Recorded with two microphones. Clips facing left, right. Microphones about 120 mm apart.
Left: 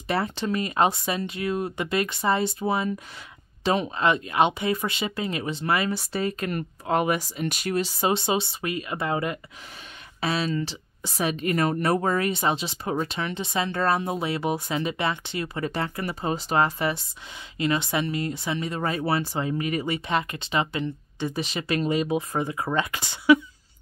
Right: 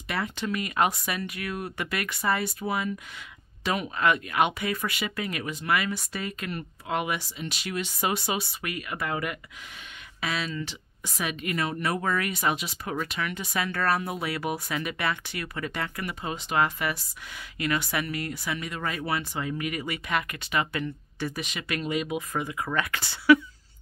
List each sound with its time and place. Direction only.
0.1 s speech: 30° left (ahead or behind)